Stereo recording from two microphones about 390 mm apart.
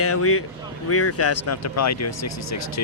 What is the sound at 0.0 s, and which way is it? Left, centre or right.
Speech, left.